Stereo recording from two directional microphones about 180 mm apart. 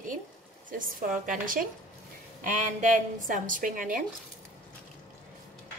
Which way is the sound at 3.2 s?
45° right (ahead or behind).